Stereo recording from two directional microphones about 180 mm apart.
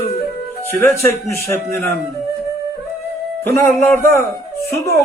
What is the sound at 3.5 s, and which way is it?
Speech, 15° left (ahead or behind).